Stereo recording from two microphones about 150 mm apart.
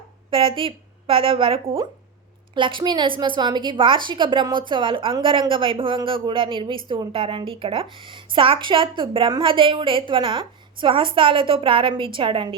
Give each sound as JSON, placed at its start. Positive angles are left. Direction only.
{"t": 0.3, "sound": "a woman's voice", "side_deg": -35}